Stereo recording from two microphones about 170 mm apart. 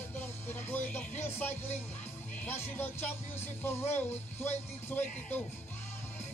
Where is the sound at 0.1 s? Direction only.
15° left (ahead or behind).